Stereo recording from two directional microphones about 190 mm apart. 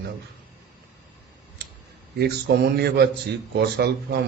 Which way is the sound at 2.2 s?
60° right (ahead or behind).